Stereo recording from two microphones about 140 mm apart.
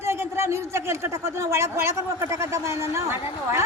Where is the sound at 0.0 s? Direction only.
20° right (ahead or behind).